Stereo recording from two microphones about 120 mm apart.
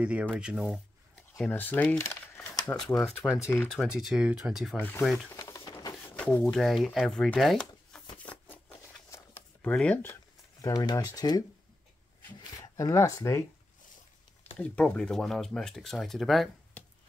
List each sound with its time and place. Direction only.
0.0 s speech: 10° right (ahead or behind)
1.4 s speech: 15° left (ahead or behind)
3.5 s speech: 5° right (ahead or behind)
4.7 s speech: 15° left (ahead or behind)
5.0 s speech: centre (ahead or behind)
5.3 s a sound: 25° left (ahead or behind)
6.1 s speech: 10° left (ahead or behind)
8.3 s a sound: 10° left (ahead or behind)
9.1 s shuffling cards: 15° left (ahead or behind)
10.6 s speech: 35° left (ahead or behind)
12.4 s a sound: 30° left (ahead or behind)
14.6 s speech: 10° left (ahead or behind)